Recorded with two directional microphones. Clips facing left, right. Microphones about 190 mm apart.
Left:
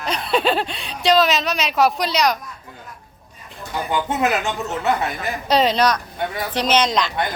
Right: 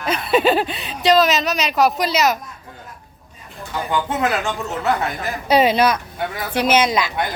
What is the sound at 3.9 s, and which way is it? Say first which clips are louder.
Speech: even; 20° left (ahead or behind).